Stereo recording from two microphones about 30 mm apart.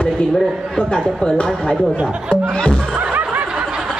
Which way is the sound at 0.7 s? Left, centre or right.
Left.